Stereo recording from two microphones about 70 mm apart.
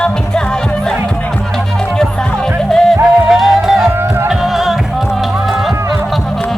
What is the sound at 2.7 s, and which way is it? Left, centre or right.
Music, centre.